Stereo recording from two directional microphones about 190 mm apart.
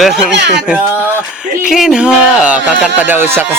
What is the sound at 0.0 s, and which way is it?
Speech, 5° right (ahead or behind).